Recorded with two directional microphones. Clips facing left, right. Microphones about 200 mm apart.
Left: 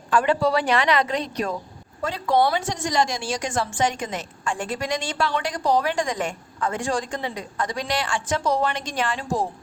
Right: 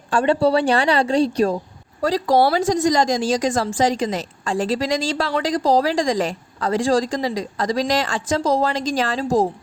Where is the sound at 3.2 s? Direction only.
90° right.